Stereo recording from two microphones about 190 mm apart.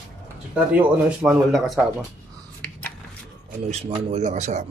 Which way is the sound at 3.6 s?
35° right (ahead or behind).